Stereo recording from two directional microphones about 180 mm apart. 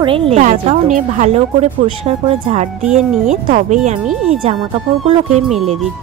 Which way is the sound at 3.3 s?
45° right (ahead or behind).